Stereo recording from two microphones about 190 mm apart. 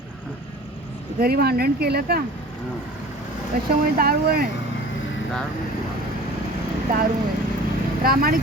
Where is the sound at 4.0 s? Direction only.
50° right (ahead or behind).